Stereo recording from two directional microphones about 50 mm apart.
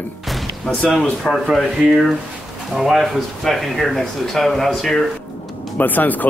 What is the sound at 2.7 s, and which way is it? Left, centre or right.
Speech, centre.